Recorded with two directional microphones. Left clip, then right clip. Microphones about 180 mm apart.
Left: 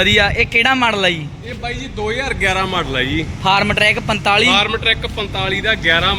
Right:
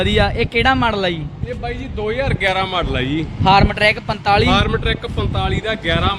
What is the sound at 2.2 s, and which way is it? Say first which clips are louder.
Speech: left 2 dB; 60° right (ahead or behind).